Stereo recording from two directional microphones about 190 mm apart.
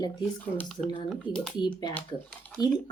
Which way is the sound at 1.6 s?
20° left (ahead or behind).